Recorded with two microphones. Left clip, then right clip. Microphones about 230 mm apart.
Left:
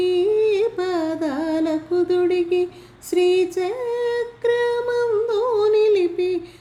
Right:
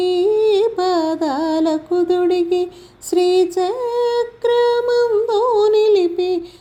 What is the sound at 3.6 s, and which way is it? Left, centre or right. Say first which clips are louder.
Female singing: right 5 dB; centre.